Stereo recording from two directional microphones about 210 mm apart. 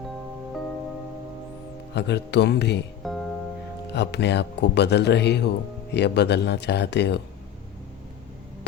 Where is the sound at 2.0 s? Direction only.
55° left (ahead or behind).